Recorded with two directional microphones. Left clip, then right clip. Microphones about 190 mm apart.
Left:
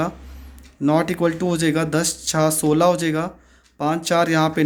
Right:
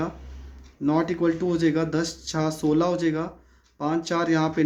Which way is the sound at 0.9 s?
35° left (ahead or behind).